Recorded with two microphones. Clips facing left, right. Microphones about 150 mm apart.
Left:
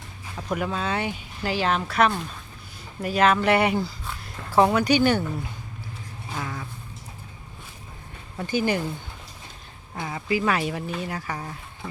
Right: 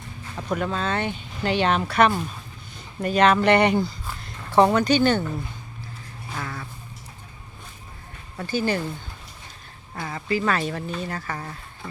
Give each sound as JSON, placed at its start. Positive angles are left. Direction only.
{"t": 0.5, "sound": "speech", "side_deg": 10}
{"t": 6.3, "sound": "vehicle", "side_deg": 10}
{"t": 8.4, "sound": "speech", "side_deg": 15}
{"t": 9.9, "sound": "speech", "side_deg": 10}